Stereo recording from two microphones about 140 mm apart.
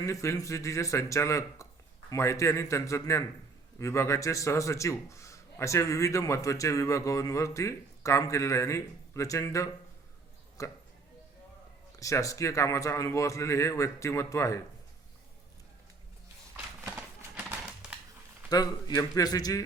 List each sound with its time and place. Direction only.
0.0 s a man's voice: 20° left (ahead or behind)
11.9 s a man's voice: 25° left (ahead or behind)
17.2 s typewriter: 10° right (ahead or behind)
18.4 s a man's voice: 30° left (ahead or behind)